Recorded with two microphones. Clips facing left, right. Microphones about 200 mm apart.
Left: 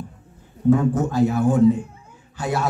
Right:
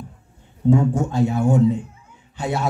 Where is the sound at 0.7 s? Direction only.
25° right (ahead or behind).